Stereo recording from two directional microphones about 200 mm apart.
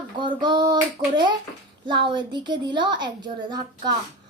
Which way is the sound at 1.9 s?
25° right (ahead or behind).